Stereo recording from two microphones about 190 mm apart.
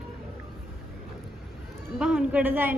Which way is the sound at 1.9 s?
5° right (ahead or behind).